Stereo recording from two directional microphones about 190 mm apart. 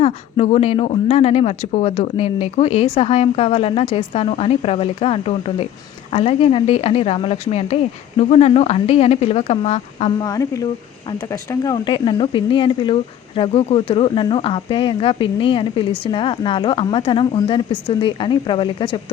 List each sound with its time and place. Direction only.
0.0 s speech: 30° left (ahead or behind)
10.2 s speech: 20° left (ahead or behind)